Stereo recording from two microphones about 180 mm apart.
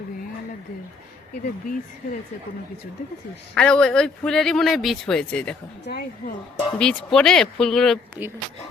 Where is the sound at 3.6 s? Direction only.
5° left (ahead or behind).